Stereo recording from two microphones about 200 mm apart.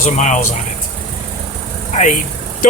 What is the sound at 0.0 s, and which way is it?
Speech, 35° left (ahead or behind).